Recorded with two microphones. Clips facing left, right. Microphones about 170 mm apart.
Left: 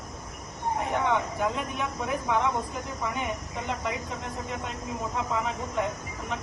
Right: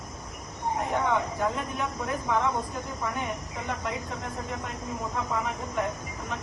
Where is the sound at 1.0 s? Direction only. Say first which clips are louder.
Left 1 dB; centre (ahead or behind).